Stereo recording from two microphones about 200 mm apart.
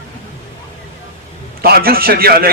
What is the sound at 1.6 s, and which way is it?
Speech, 50° right (ahead or behind).